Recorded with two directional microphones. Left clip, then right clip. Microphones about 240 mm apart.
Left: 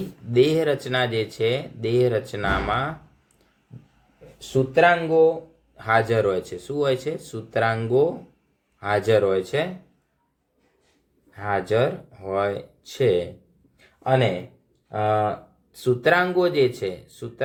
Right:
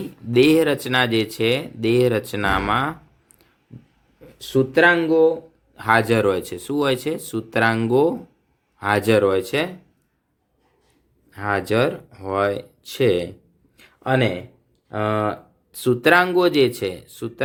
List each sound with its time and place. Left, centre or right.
0.3 s speech: right
4.4 s speech: right
11.3 s speech: right
13.7 s a sound: right
14.8 s speech: right